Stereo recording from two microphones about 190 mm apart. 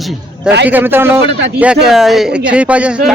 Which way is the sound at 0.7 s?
10° right (ahead or behind).